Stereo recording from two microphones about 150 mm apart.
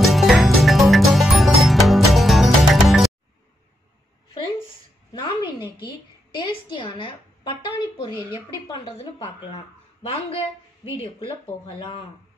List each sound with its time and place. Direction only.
0.0 s music: centre (ahead or behind)
6.3 s a woman's voice: 30° left (ahead or behind)